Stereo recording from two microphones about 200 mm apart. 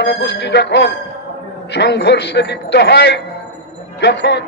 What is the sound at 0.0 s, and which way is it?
A man's voice, 60° left (ahead or behind).